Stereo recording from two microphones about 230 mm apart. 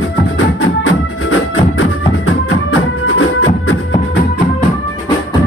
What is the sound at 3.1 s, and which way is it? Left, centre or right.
Music, left.